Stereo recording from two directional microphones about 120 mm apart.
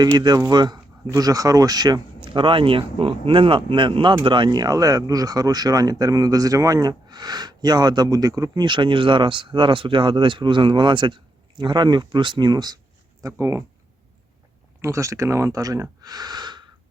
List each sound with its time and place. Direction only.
0.0 s speech: 35° right (ahead or behind)
13.2 s speech: 25° right (ahead or behind)
14.8 s speech: 25° right (ahead or behind)